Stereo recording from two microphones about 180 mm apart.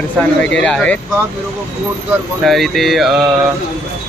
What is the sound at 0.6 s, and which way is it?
Speech, 5° left (ahead or behind).